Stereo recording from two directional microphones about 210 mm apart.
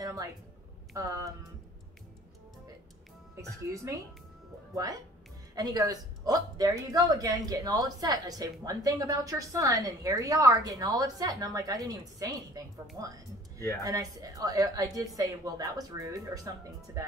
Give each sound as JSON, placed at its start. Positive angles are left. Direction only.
{"t": 0.0, "sound": "a sound", "side_deg": -15}
{"t": 0.9, "sound": "speech", "side_deg": -15}
{"t": 3.3, "sound": "speech", "side_deg": -15}
{"t": 5.5, "sound": "speech", "side_deg": -20}